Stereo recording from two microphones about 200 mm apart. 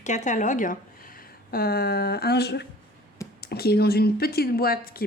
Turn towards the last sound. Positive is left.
turn(degrees=50)  # may be behind; listen again after turning